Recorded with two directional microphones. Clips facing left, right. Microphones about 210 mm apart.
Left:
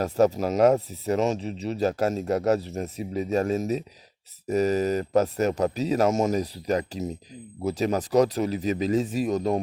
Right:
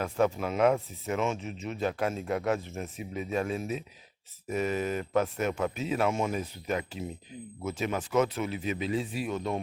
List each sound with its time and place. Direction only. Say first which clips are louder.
0.0 s speech: left 6 dB; 40° left (ahead or behind)